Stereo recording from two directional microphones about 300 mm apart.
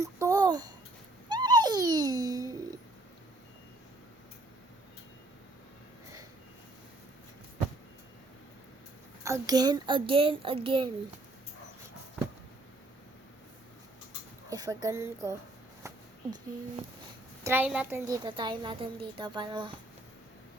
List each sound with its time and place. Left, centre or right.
0.0 s a sound: centre
1.3 s babbling: centre
9.2 s a woman's voice: centre
14.5 s speech: centre
17.4 s a woman's voice: centre